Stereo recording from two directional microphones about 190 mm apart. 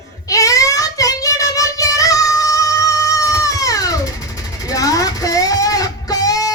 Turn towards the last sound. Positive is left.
turn(degrees=20)  # may be behind; listen again after turning